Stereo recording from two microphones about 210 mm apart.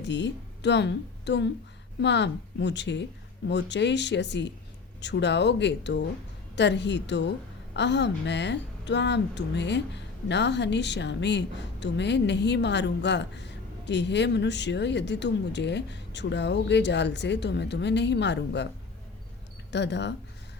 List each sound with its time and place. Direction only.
0.0 s a woman's voice: 55° left (ahead or behind)
19.7 s a woman's voice: 55° left (ahead or behind)